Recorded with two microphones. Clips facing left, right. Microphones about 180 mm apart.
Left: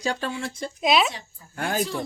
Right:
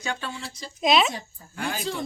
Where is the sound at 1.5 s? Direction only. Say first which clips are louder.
Left 5 dB; 50° left (ahead or behind).